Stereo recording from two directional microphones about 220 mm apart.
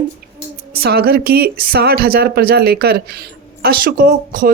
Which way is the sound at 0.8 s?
45° right (ahead or behind).